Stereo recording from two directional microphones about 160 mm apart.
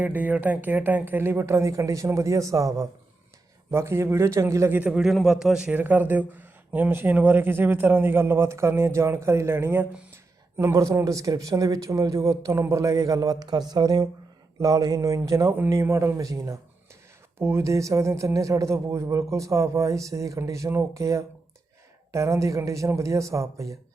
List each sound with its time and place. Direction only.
0.0 s a man's voice: 10° right (ahead or behind)